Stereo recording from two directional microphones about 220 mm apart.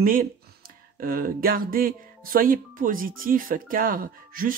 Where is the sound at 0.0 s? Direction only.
40° right (ahead or behind).